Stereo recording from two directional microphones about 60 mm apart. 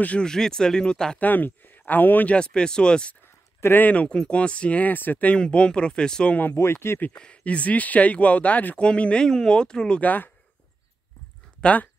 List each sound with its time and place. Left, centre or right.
0.0 s speech: left
0.3 s speech: centre
1.2 s speech: left
2.2 s speech: centre
3.3 s a sound: left
3.8 s speech: left
5.3 s speech: centre
6.5 s speech: left
7.2 s speech: centre
10.0 s speech: left
11.6 s speech: left